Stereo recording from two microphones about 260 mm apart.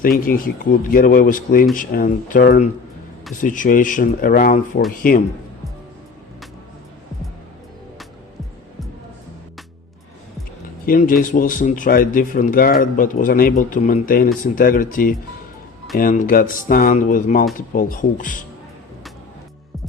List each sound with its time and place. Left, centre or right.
0.0 s speech: left
10.8 s speech: left